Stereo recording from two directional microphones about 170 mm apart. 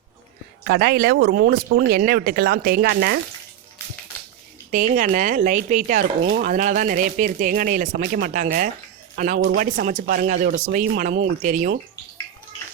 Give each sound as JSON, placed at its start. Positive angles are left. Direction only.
{"t": 0.7, "sound": "speech", "side_deg": -70}
{"t": 4.7, "sound": "speech", "side_deg": -45}